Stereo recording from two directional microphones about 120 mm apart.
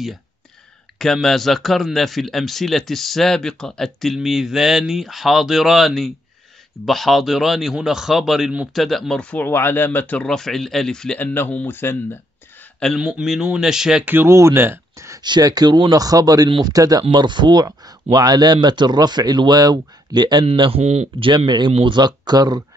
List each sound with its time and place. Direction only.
0.9 s speech: 5° left (ahead or behind)
10.2 s speech: 5° left (ahead or behind); by 12.2 s 20° left (ahead or behind)
12.8 s speech: centre (ahead or behind)
14.1 s speech: 20° right (ahead or behind)
15.2 s speech: 35° right (ahead or behind)
16.4 s speech: 45° right (ahead or behind)
16.7 s speech: 30° right (ahead or behind)
20.8 s speech: 70° right (ahead or behind)
21.2 s speech: 45° right (ahead or behind)